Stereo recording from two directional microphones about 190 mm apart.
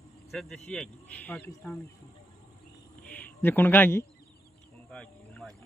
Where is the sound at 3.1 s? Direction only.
10° left (ahead or behind).